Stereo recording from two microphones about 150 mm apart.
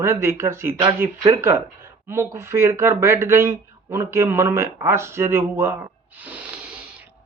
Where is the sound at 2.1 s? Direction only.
15° right (ahead or behind).